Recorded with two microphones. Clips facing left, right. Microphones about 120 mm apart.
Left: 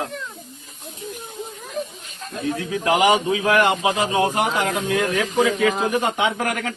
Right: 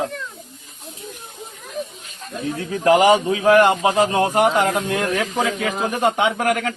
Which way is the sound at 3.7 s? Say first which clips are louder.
Right 3 dB; 60° right (ahead or behind).